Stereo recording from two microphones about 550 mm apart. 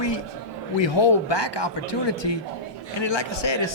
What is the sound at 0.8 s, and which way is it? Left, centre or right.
A man's voice, left.